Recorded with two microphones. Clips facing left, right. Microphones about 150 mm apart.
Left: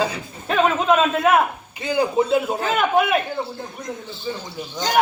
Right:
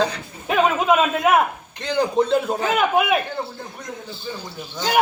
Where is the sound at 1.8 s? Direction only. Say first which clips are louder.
Even; 5° left (ahead or behind).